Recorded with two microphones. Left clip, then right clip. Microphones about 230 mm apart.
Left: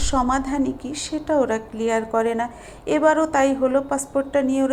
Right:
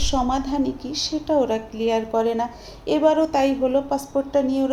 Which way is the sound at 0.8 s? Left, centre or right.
Right.